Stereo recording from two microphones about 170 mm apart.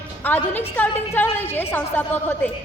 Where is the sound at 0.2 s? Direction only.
10° left (ahead or behind).